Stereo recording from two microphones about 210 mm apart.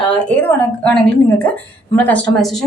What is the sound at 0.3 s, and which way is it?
A woman's voice, 5° left (ahead or behind).